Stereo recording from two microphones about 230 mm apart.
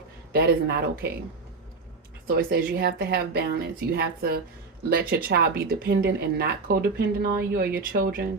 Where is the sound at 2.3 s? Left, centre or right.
Right.